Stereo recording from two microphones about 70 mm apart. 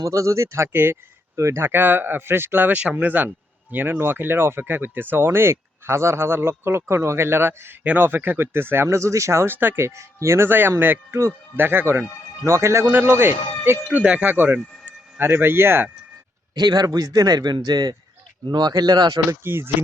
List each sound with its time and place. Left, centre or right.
0.0 s speech: right
1.4 s speech: right
12.5 s speech: right
12.9 s speech: right
13.8 s speech: centre
14.3 s speech: right
16.6 s speech: right
16.8 s speech: right
18.4 s speech: right
18.7 s speech: right
19.4 s speech: right